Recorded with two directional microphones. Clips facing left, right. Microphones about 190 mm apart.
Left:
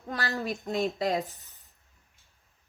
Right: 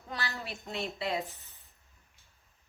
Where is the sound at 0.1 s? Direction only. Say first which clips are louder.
Left 7 dB; 50° left (ahead or behind).